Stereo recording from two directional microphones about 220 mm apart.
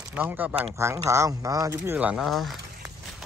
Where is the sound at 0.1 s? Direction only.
10° right (ahead or behind).